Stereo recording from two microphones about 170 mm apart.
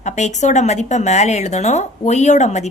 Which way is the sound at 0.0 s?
45° left (ahead or behind).